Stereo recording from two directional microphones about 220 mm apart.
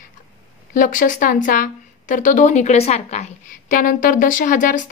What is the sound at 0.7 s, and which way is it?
A woman's voice, 35° left (ahead or behind).